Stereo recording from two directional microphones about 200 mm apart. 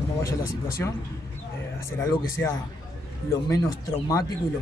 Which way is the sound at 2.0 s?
10° left (ahead or behind).